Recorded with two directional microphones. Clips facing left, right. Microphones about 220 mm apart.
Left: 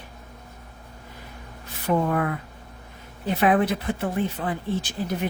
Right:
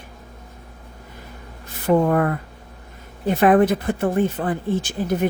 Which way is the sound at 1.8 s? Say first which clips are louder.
Right 6 dB; 50° right (ahead or behind).